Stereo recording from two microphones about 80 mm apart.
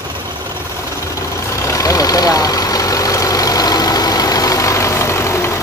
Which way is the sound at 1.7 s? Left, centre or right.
Left.